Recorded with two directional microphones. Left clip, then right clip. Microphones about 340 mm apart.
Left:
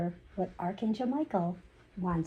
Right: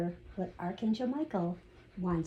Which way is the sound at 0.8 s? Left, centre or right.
Left.